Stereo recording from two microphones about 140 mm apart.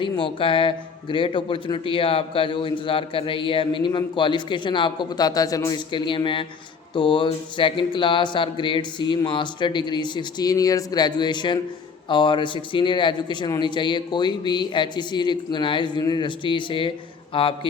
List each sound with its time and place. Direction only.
0.0 s a man's voice: 40° left (ahead or behind)